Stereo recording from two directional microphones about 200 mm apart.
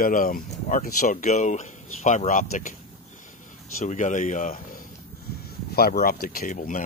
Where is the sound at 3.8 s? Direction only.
35° left (ahead or behind).